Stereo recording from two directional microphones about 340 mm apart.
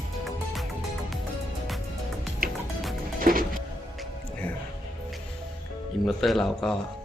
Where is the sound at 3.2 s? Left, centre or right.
Right.